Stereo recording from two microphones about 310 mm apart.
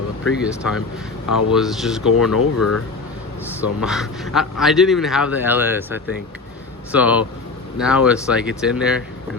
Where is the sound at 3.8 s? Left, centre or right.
Centre.